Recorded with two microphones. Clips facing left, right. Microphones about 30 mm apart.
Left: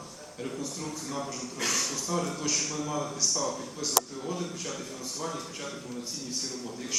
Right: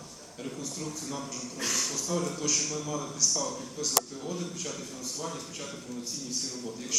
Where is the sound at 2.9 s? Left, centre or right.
Centre.